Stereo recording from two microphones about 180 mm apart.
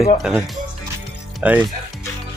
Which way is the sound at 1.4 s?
10° right (ahead or behind).